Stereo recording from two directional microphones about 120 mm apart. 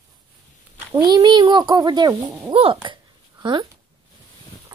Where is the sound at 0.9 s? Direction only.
30° right (ahead or behind).